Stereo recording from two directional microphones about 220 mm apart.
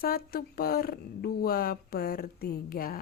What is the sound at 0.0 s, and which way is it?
Speech, 45° left (ahead or behind).